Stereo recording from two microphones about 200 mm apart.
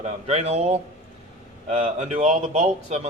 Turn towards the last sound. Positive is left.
turn(degrees=-30)  # may be behind; listen again after turning